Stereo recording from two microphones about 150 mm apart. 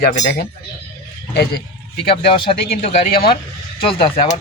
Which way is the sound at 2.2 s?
35° left (ahead or behind).